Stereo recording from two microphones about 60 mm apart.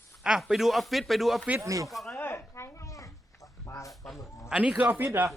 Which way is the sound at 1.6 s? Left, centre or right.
Right.